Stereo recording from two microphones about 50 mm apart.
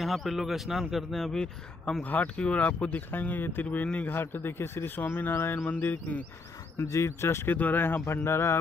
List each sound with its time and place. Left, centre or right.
0.0 s a man's voice: centre
1.3 s speech: centre
2.0 s speech: left
3.1 s speech: left
3.7 s speech: left
4.1 s a man's voice: left
6.8 s speech: left
7.5 s a man's voice: left
8.0 s speech: left